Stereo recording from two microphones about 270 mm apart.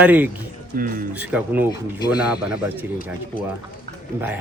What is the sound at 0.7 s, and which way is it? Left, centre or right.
Speech, right.